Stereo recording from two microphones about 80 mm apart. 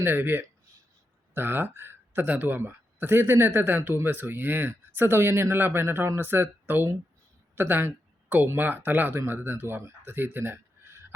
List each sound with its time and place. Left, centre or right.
0.0 s speech: right
7.5 s a sound: right
8.4 s speech: right